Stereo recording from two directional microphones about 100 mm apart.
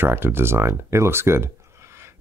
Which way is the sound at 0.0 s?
20° right (ahead or behind).